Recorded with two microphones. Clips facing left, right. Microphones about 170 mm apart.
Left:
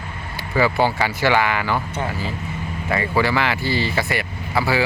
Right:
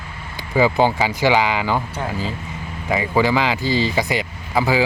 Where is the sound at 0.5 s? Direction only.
15° right (ahead or behind).